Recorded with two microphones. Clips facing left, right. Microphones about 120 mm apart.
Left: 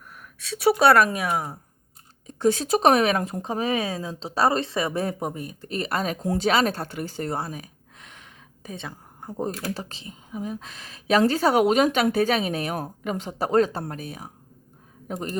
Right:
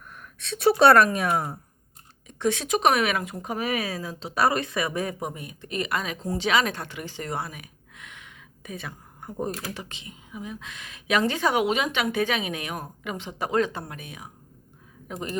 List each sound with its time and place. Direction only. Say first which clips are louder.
0.1 s a sound: even; 10° left (ahead or behind)
0.8 s speech: right 2 dB; 5° left (ahead or behind)
2.2 s speech: left 4 dB; 35° left (ahead or behind)
3.4 s speech: left 1 dB; 30° left (ahead or behind)